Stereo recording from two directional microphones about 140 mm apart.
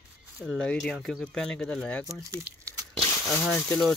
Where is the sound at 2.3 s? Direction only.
25° right (ahead or behind).